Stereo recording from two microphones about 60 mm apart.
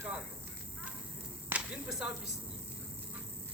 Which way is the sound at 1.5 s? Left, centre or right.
Right.